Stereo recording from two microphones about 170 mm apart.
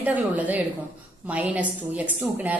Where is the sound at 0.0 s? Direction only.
10° right (ahead or behind).